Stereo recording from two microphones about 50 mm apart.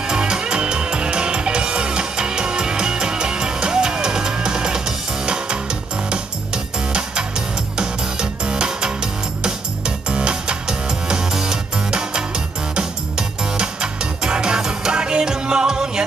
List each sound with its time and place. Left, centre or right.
0.0 s music: centre
13.6 s music: centre